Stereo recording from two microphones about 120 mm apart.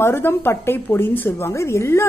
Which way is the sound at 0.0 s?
20° left (ahead or behind).